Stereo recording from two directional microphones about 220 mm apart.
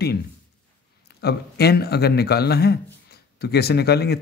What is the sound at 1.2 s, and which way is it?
Speech, 45° left (ahead or behind).